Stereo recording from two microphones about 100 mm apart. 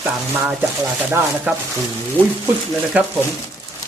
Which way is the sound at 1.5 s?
15° right (ahead or behind).